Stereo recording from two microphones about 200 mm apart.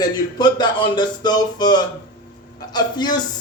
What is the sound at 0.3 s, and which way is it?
Speech, 20° left (ahead or behind).